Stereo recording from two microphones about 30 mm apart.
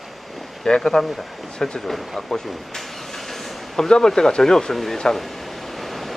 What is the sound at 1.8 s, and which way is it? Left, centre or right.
Speech, centre.